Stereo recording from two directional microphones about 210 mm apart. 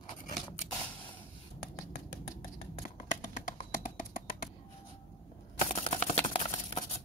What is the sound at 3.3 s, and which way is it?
Tap, 40° left (ahead or behind).